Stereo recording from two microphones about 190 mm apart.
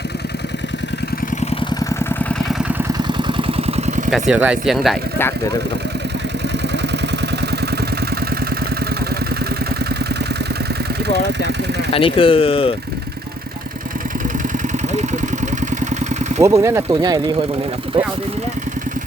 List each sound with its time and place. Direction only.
2.5 s vehicle: 10° right (ahead or behind)
3.0 s vehicle: 25° right (ahead or behind)
4.1 s speech: 5° right (ahead or behind)
11.1 s speech: 65° right (ahead or behind)
11.9 s speech: 30° left (ahead or behind)
16.4 s speech: 15° right (ahead or behind)